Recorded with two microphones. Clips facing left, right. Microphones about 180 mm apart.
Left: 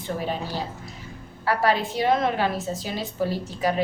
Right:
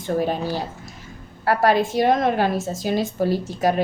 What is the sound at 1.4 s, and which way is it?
A woman's voice, 45° right (ahead or behind).